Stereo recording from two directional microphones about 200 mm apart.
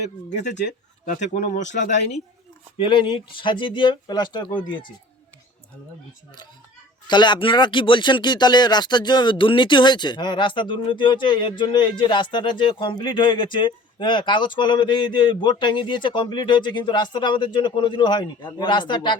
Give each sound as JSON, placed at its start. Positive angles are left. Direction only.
{"t": 1.0, "sound": "speech", "side_deg": 40}
{"t": 2.7, "sound": "speech", "side_deg": 25}
{"t": 7.1, "sound": "speech", "side_deg": 20}